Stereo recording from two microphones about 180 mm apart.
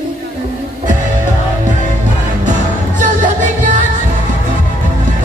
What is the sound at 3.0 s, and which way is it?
Music, 45° right (ahead or behind).